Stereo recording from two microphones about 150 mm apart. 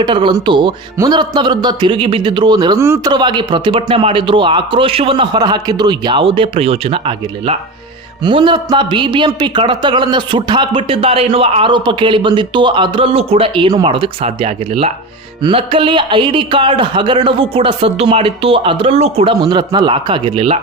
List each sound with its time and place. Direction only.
0.0 s a man's voice: 30° right (ahead or behind)
2.8 s speech: 15° right (ahead or behind)
3.1 s speech: 30° right (ahead or behind)